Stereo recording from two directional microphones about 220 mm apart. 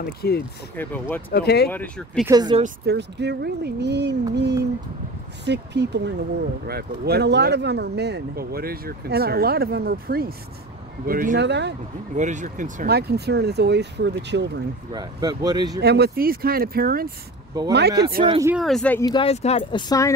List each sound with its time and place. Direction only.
0.2 s speech: 45° left (ahead or behind)
0.7 s speech: 10° left (ahead or behind)
1.3 s speech: 45° left (ahead or behind)
1.7 s speech: 5° left (ahead or behind)
2.2 s speech: 20° right (ahead or behind)
2.6 s speech: 50° right (ahead or behind)
12.2 s speech: 35° right (ahead or behind); by 14.6 s 50° right (ahead or behind)
14.9 s speech: 20° right (ahead or behind)
15.8 s speech: 45° right (ahead or behind)
17.6 s speech: 20° right (ahead or behind)
18.5 s speech: centre (ahead or behind); by 20.1 s 20° left (ahead or behind)